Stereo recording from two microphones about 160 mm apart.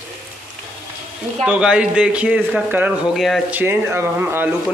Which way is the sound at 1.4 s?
5° right (ahead or behind).